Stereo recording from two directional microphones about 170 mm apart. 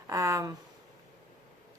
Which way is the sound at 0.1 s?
20° right (ahead or behind).